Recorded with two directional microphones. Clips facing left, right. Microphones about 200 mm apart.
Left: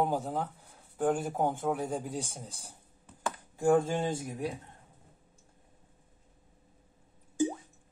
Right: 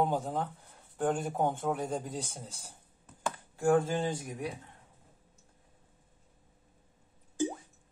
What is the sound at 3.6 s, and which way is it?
Speech, 20° left (ahead or behind).